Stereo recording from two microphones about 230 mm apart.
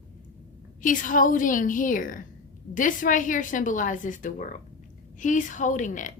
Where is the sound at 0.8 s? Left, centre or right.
Left.